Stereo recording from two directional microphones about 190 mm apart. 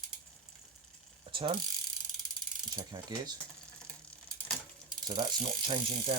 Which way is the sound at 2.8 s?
20° right (ahead or behind).